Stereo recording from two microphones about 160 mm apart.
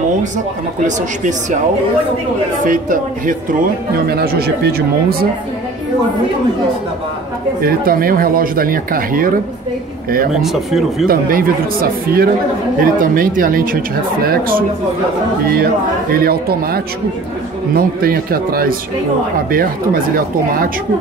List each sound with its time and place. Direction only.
0.8 s speech: 50° right (ahead or behind)
2.6 s speech: 55° right (ahead or behind)
4.1 s speech: 75° right (ahead or behind)
7.6 s speech: 65° right (ahead or behind)
10.4 s speech: centre (ahead or behind)
11.1 s speech: 65° right (ahead or behind)
15.5 s speech: 70° right (ahead or behind)